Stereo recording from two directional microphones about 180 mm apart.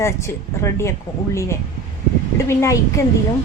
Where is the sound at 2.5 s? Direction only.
15° left (ahead or behind).